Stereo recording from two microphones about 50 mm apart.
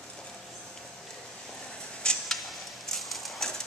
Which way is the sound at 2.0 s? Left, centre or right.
Centre.